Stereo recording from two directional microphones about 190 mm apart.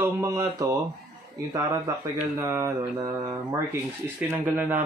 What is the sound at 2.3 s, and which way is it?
Speech, 15° right (ahead or behind).